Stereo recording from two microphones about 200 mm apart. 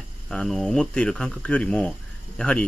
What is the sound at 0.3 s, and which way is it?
Speech, centre (ahead or behind).